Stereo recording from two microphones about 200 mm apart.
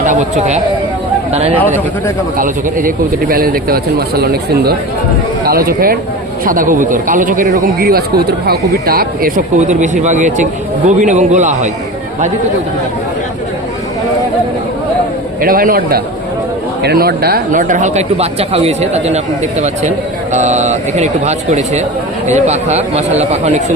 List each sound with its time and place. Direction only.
0.0 s a man's voice: 35° right (ahead or behind)
2.4 s a man's voice: 45° right (ahead or behind)
15.4 s a man's voice: 45° right (ahead or behind)